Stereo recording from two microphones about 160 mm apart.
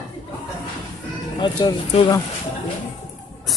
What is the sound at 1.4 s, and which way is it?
Speech, 30° left (ahead or behind).